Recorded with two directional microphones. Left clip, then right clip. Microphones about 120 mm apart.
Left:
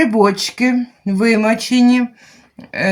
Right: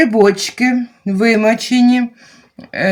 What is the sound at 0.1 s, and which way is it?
Speech, 30° right (ahead or behind).